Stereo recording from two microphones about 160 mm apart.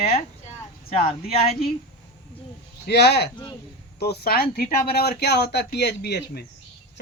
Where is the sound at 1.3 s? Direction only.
40° left (ahead or behind).